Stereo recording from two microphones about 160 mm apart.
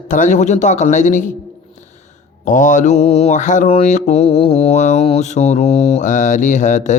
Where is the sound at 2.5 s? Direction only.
55° left (ahead or behind).